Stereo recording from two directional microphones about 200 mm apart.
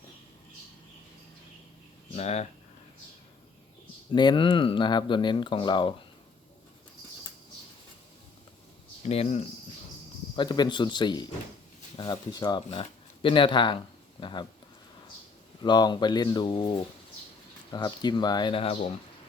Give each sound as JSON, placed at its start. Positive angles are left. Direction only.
{"t": 2.1, "sound": "speech", "side_deg": 35}
{"t": 4.1, "sound": "speech", "side_deg": 20}
{"t": 9.0, "sound": "speech", "side_deg": 30}
{"t": 15.6, "sound": "speech", "side_deg": 20}